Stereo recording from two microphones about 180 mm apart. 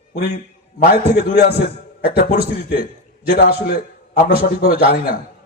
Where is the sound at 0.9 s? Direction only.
60° left (ahead or behind).